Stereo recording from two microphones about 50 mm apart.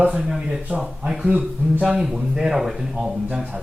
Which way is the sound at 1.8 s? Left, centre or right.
Centre.